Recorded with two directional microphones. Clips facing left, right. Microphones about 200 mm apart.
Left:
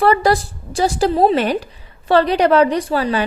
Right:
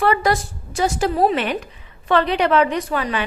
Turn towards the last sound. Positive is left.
turn(degrees=35)  # may be behind; listen again after turning